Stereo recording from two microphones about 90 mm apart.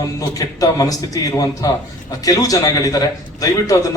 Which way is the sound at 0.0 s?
40° left (ahead or behind).